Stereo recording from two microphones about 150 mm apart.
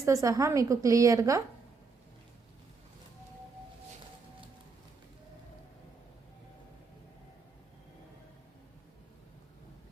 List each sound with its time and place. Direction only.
0.0 s a woman's voice: 20° right (ahead or behind)